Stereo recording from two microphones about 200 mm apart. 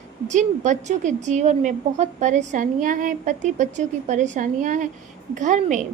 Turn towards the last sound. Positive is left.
turn(degrees=-40)  # may be behind; listen again after turning